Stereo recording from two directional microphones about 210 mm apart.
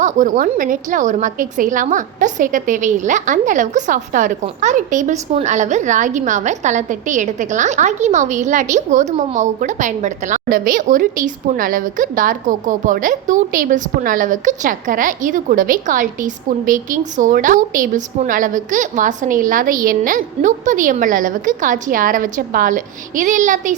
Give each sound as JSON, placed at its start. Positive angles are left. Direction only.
{"t": 0.0, "sound": "a woman's voice", "side_deg": -40}